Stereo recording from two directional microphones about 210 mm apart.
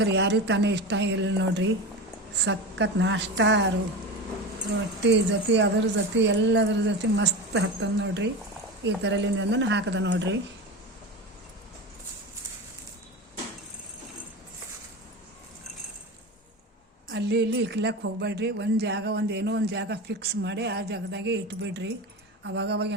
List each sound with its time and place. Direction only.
0.0 s a woman's voice: 55° right (ahead or behind)
5.0 s a woman's voice: 55° right (ahead or behind)
17.1 s a woman's voice: 55° right (ahead or behind)